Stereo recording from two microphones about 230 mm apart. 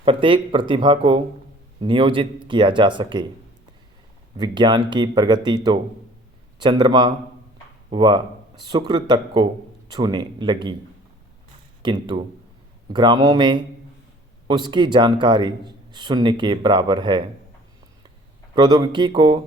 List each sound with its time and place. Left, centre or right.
0.0 s speech: right
4.4 s speech: centre
6.6 s speech: centre
11.8 s speech: centre
18.5 s speech: centre